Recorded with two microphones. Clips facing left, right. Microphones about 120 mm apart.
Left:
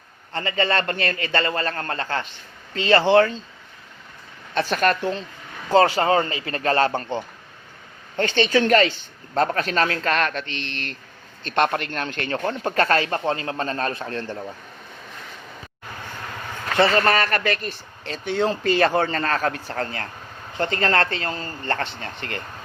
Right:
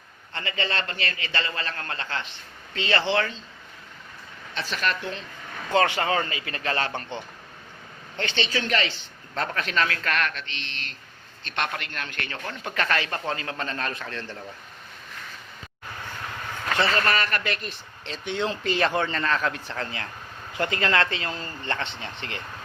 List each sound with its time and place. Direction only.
0.3 s speech: 40° left (ahead or behind)
4.5 s speech: 50° left (ahead or behind)
11.4 s speech: 40° left (ahead or behind)
16.7 s speech: 45° left (ahead or behind)